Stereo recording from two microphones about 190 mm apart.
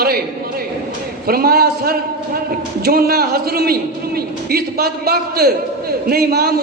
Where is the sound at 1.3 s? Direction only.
50° right (ahead or behind).